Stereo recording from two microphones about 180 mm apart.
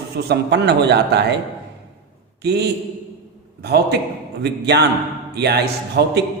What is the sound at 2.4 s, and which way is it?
A man's voice, 65° right (ahead or behind).